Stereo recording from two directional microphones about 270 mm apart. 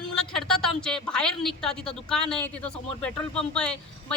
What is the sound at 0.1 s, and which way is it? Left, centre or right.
A woman's voice, centre.